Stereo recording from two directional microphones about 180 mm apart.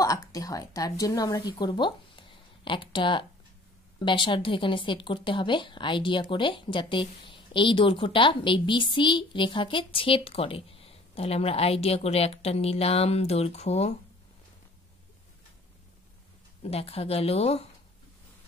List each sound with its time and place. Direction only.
0.0 s a woman's voice: 20° left (ahead or behind); by 13.9 s 35° left (ahead or behind)
16.6 s a woman's voice: 35° left (ahead or behind)